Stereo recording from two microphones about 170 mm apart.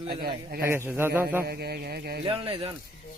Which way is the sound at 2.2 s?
30° right (ahead or behind).